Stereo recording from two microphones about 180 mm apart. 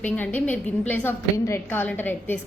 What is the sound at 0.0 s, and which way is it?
A woman's voice, 10° left (ahead or behind).